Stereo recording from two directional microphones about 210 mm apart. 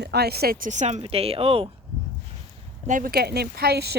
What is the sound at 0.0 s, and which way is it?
Speech, 50° right (ahead or behind).